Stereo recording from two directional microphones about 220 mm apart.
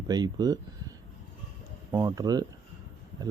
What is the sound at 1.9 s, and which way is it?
Speech, 15° right (ahead or behind).